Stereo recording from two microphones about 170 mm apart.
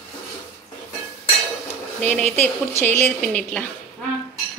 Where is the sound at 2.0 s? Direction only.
10° left (ahead or behind).